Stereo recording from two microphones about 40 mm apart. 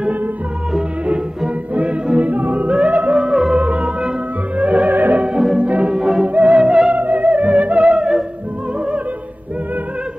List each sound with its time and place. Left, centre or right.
1.7 s music: right
3.2 s music: centre
3.5 s music: right
4.8 s music: right
5.6 s music: right
6.6 s theremin: right
6.9 s music: right
7.9 s music: right